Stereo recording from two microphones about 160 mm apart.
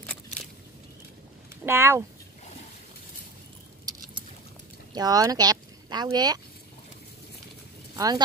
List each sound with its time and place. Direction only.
1.7 s speech: 15° right (ahead or behind)
4.9 s speech: 25° right (ahead or behind)
7.9 s a sound: 25° right (ahead or behind)